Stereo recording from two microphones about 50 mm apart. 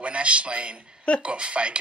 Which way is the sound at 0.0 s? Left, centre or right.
Right.